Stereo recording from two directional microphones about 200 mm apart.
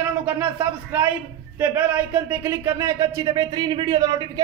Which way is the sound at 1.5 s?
10° right (ahead or behind).